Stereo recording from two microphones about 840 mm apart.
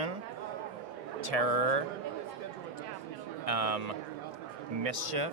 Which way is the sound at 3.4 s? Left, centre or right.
Right.